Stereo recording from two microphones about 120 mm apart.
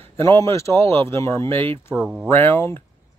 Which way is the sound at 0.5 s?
25° left (ahead or behind).